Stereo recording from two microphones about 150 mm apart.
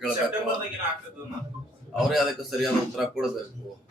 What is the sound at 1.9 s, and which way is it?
Speech, centre (ahead or behind).